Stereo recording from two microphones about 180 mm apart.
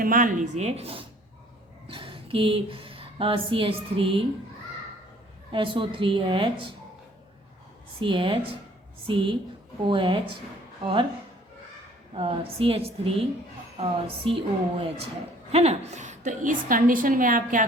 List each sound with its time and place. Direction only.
0.0 s a woman's voice: 50° right (ahead or behind); by 4.3 s 30° right (ahead or behind)
5.5 s a woman's voice: 30° right (ahead or behind)
7.9 s a woman's voice: 30° right (ahead or behind)
12.1 s a woman's voice: 30° right (ahead or behind)
14.3 s a woman's voice: 30° right (ahead or behind); by 17.7 s 50° right (ahead or behind)